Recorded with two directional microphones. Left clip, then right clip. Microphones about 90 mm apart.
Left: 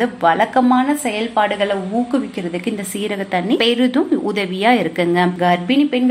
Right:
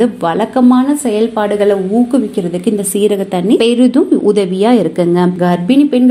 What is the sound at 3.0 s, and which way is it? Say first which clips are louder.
Speech: right 6 dB; 40° right (ahead or behind).